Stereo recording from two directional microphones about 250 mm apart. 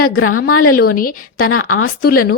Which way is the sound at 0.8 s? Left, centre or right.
Left.